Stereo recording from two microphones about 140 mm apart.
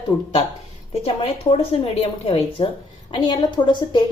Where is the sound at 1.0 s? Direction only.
45° left (ahead or behind).